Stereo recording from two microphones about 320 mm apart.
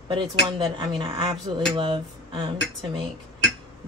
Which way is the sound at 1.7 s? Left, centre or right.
Centre.